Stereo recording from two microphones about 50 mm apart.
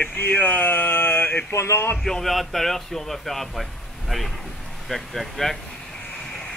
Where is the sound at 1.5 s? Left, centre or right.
Left.